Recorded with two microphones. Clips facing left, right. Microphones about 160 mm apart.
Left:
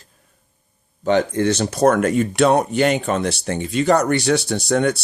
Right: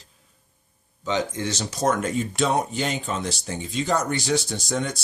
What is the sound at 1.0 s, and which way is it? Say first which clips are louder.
Speech: left 9 dB; 60° left (ahead or behind).